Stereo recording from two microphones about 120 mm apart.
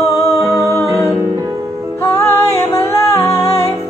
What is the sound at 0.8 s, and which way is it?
Music, 20° right (ahead or behind).